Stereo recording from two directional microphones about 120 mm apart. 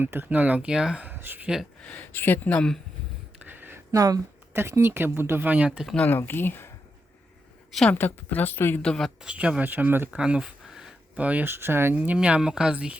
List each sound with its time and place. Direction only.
0.0 s speech: 20° right (ahead or behind)
1.8 s speech: 15° left (ahead or behind)
3.3 s a sound: 15° right (ahead or behind)
4.5 s speech: 20° right (ahead or behind)
5.9 s speech: 15° left (ahead or behind)
7.9 s speech: 15° left (ahead or behind)
8.8 s speech: 5° left (ahead or behind)
9.2 s speech: 10° right (ahead or behind)